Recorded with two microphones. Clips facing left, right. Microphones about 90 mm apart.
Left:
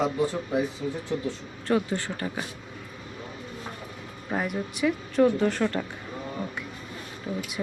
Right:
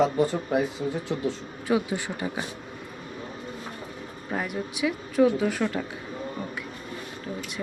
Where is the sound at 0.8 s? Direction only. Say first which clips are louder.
Right 2 dB; 35° right (ahead or behind).